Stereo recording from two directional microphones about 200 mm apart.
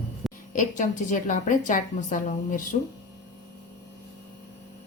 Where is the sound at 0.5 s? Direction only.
40° left (ahead or behind).